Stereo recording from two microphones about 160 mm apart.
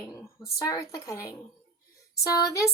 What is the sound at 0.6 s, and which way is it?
Speech, 20° left (ahead or behind).